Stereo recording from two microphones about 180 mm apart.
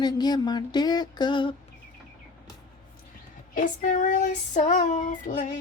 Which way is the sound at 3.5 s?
45° left (ahead or behind).